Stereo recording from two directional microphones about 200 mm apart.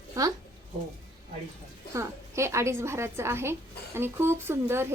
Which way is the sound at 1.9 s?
15° right (ahead or behind).